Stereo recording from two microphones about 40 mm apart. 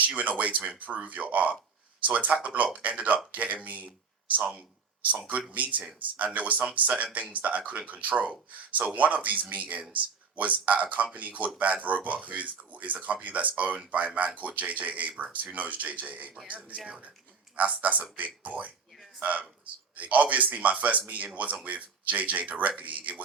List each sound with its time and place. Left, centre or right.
0.2 s speech: right
17.6 s speech: right